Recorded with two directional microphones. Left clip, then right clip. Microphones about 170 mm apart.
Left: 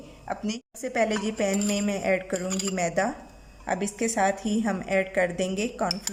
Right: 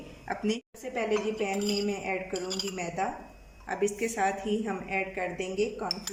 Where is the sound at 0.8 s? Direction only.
45° left (ahead or behind).